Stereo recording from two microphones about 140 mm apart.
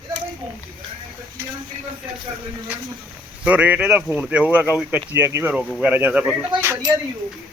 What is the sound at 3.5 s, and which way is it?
Speech, 10° right (ahead or behind).